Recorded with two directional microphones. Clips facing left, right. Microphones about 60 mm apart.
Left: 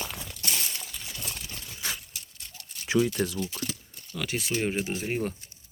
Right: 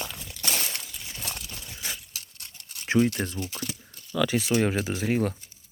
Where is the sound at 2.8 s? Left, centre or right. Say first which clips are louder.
Right 2 dB; right.